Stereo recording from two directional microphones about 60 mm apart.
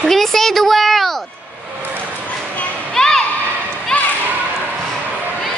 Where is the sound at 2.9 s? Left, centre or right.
Centre.